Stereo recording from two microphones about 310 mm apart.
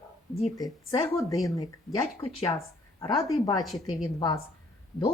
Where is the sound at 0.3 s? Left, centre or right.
Centre.